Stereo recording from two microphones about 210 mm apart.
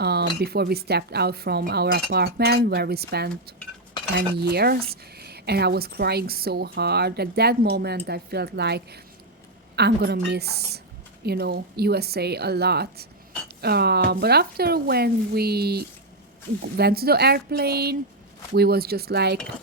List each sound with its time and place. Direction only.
0.0 s a woman's voice: 50° right (ahead or behind)